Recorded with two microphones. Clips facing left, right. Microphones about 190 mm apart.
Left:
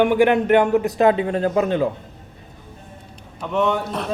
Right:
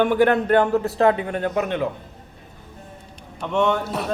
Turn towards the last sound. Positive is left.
turn(degrees=-5)  # may be behind; listen again after turning